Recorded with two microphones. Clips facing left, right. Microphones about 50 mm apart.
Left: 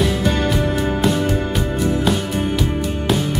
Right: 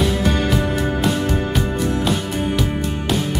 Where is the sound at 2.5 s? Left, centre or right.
Centre.